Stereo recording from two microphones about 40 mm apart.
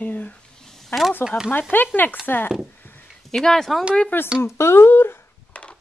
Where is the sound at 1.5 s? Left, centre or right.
Left.